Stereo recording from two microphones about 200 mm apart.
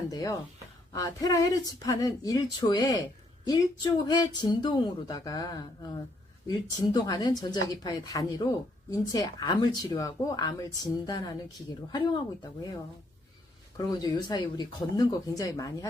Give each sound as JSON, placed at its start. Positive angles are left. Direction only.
{"t": 0.1, "sound": "speech", "side_deg": 15}
{"t": 13.7, "sound": "speech", "side_deg": 20}